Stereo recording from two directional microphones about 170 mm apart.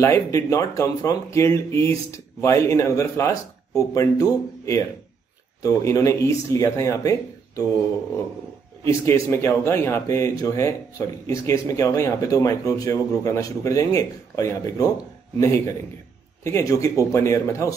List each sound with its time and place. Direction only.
0.0 s speech: 20° left (ahead or behind)
8.8 s speech: 15° left (ahead or behind)
16.4 s speech: 20° left (ahead or behind)